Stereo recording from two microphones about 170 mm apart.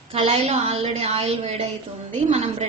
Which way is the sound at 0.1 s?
35° right (ahead or behind).